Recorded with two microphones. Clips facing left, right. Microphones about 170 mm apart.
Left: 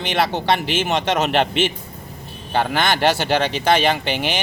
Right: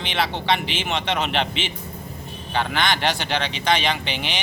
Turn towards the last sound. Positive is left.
turn(degrees=50)  # may be behind; listen again after turning